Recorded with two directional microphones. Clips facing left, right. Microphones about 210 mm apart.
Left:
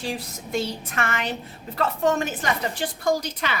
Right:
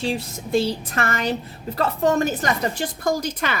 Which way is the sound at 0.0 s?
25° right (ahead or behind).